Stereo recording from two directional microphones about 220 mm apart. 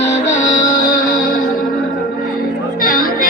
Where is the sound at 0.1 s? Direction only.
35° left (ahead or behind).